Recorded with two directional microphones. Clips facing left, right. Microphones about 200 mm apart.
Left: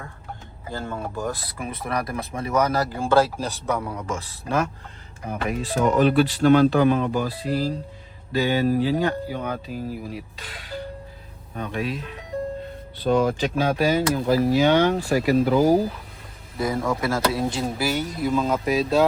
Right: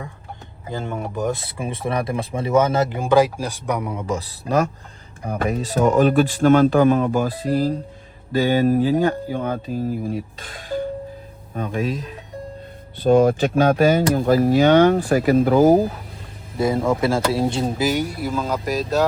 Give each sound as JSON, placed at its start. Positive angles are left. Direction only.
{"t": 0.7, "sound": "speech", "side_deg": -20}
{"t": 4.0, "sound": "a man's voice", "side_deg": -35}
{"t": 5.6, "sound": "speech", "side_deg": -45}
{"t": 13.0, "sound": "speech", "side_deg": -50}
{"t": 16.6, "sound": "speech", "side_deg": -25}